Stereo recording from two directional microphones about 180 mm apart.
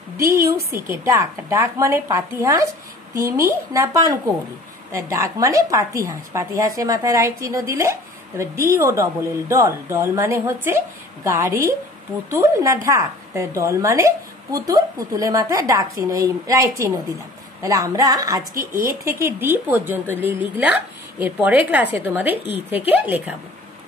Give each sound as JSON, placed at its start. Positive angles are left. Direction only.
{"t": 0.2, "sound": "a woman's voice", "side_deg": -15}
{"t": 0.7, "sound": "speech", "side_deg": -55}
{"t": 1.0, "sound": "a woman's voice", "side_deg": -15}
{"t": 3.2, "sound": "speech", "side_deg": -50}
{"t": 3.4, "sound": "a woman's voice", "side_deg": -15}
{"t": 18.5, "sound": "speech", "side_deg": -50}
{"t": 19.0, "sound": "a woman's voice", "side_deg": -15}